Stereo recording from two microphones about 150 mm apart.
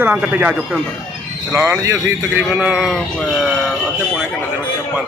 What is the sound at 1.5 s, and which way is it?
A man's voice, 15° right (ahead or behind).